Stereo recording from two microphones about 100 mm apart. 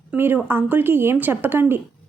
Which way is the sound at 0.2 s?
20° right (ahead or behind).